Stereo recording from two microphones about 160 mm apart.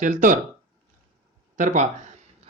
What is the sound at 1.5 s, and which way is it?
Speech, 50° right (ahead or behind).